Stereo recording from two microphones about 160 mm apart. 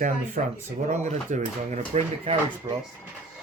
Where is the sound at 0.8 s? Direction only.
45° right (ahead or behind).